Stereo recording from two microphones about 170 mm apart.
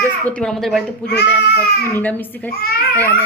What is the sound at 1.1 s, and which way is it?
Speech, 80° left.